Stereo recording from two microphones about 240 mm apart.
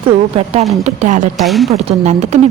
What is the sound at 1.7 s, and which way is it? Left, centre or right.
Speech, right.